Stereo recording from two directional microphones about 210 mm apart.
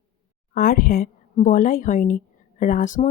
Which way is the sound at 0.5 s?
45° left (ahead or behind).